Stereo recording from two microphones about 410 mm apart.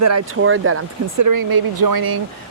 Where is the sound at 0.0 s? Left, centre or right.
Right.